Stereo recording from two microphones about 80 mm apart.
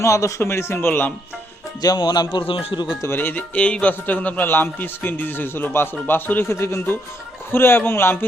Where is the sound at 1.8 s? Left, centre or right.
Left.